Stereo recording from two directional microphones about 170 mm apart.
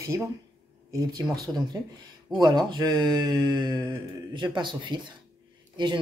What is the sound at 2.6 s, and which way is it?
Speech, 25° right (ahead or behind).